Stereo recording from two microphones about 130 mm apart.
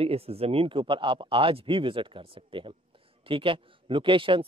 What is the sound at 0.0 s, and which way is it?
A man's voice, 50° right (ahead or behind).